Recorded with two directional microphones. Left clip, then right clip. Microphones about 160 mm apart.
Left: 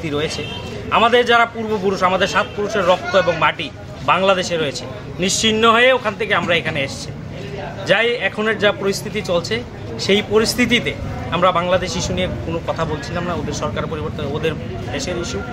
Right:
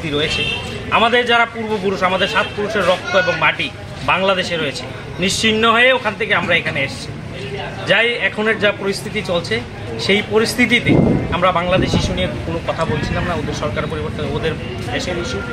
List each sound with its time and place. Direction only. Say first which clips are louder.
0.9 s a man's voice: even; 35° left (ahead or behind)
7.8 s a man's voice: right 1 dB; 35° left (ahead or behind)
13.3 s a man's voice: right 2 dB; 35° left (ahead or behind)